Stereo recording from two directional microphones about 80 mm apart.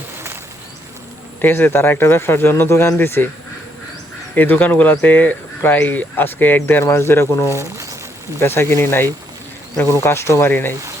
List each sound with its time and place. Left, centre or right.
1.4 s speech: left
4.4 s speech: left
6.8 s speech: left
7.5 s speech: right
8.4 s speech: left